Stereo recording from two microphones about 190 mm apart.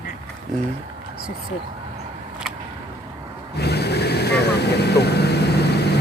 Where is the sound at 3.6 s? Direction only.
60° left (ahead or behind).